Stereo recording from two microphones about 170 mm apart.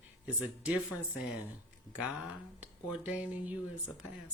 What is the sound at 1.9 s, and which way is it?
Speech, 5° right (ahead or behind).